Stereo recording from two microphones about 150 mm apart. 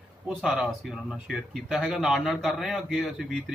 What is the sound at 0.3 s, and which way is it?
A man's voice, 5° right (ahead or behind).